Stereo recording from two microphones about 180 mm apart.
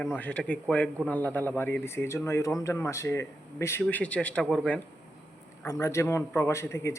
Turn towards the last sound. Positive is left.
turn(degrees=15)  # may be behind; listen again after turning